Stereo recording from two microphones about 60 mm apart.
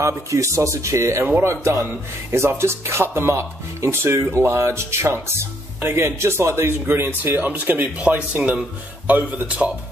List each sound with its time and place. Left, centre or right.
0.0 s speech: right